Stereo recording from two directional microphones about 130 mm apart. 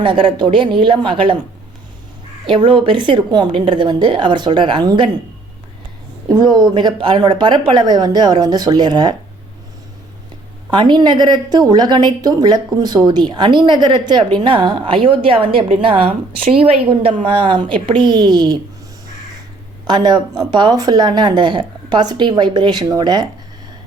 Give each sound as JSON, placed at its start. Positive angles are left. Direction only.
{"t": 0.0, "sound": "a woman's voice", "side_deg": -40}
{"t": 2.5, "sound": "a woman's voice", "side_deg": -40}
{"t": 6.2, "sound": "a woman's voice", "side_deg": -30}
{"t": 10.7, "sound": "a woman's voice", "side_deg": -35}
{"t": 19.9, "sound": "a woman's voice", "side_deg": -35}